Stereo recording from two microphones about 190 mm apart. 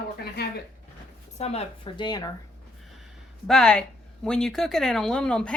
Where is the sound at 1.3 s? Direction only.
35° left (ahead or behind).